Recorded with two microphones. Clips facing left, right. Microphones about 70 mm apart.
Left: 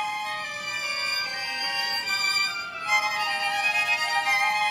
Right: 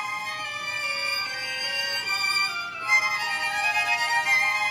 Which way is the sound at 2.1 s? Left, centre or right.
Right.